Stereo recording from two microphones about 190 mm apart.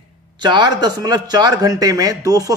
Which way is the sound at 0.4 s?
20° right (ahead or behind).